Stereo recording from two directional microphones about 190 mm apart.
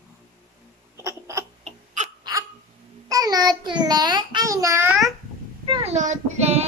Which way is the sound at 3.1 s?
20° right (ahead or behind).